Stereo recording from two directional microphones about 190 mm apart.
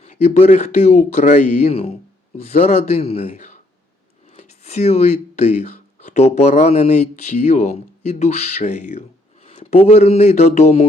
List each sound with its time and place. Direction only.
0.0 s speech: 35° left (ahead or behind)